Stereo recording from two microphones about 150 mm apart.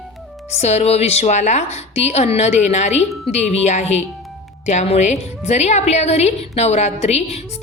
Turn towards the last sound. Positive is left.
turn(degrees=45)  # may be behind; listen again after turning